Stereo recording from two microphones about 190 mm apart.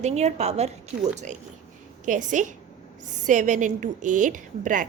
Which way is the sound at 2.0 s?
40° right (ahead or behind).